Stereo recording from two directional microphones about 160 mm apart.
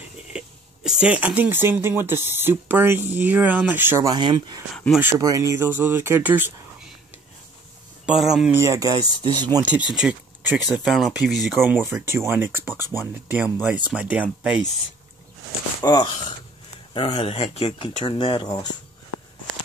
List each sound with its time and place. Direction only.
0.3 s speech: 5° right (ahead or behind)
4.1 s speech: 30° right (ahead or behind); by 6.5 s 10° right (ahead or behind)
8.0 s speech: 5° right (ahead or behind)
8.5 s speech: 20° right (ahead or behind)
9.6 s speech: 10° right (ahead or behind)
11.5 s speech: 15° right (ahead or behind)
15.8 s speech: 25° left (ahead or behind)